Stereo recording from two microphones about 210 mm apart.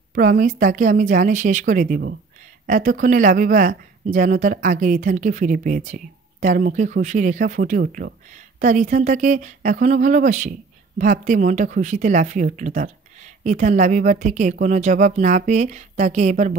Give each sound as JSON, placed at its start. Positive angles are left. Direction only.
{"t": 0.1, "sound": "speech", "side_deg": -40}